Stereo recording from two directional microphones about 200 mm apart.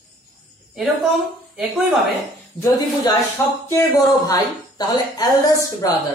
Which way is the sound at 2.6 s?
15° left (ahead or behind).